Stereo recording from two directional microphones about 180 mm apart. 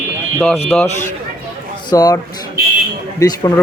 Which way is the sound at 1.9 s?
20° left (ahead or behind).